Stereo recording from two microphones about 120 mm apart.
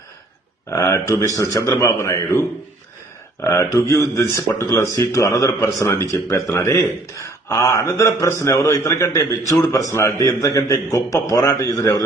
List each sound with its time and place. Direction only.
0.7 s a man's voice: 25° left (ahead or behind)